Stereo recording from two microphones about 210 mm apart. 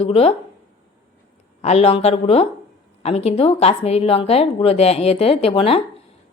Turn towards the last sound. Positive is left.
turn(degrees=25)  # may be behind; listen again after turning